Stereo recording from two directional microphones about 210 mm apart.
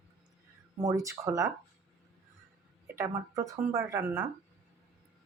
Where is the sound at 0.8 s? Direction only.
15° right (ahead or behind).